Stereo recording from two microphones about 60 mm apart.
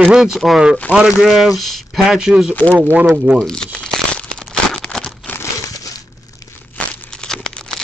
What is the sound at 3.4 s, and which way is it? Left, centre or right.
Crumpling, centre.